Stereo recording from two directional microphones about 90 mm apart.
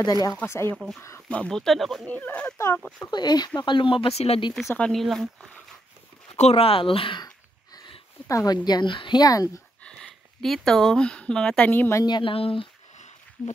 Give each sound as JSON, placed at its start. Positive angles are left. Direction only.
{"t": 0.0, "sound": "speech", "side_deg": 45}
{"t": 1.3, "sound": "speech", "side_deg": 10}
{"t": 2.0, "sound": "speech", "side_deg": 20}
{"t": 3.1, "sound": "speech", "side_deg": 50}
{"t": 4.7, "sound": "speech", "side_deg": 10}
{"t": 5.0, "sound": "speech", "side_deg": 0}
{"t": 6.2, "sound": "speech", "side_deg": 90}
{"t": 8.3, "sound": "speech", "side_deg": 35}
{"t": 8.6, "sound": "speech", "side_deg": 60}
{"t": 9.2, "sound": "speech", "side_deg": 40}
{"t": 9.8, "sound": "speech", "side_deg": 0}
{"t": 12.1, "sound": "speech", "side_deg": 80}